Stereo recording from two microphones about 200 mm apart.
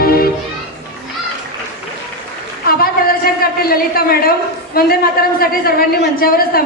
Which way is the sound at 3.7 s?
50° left (ahead or behind).